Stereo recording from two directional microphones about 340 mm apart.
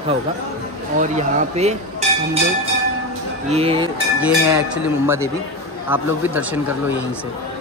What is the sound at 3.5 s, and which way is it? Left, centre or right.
A man's voice, centre.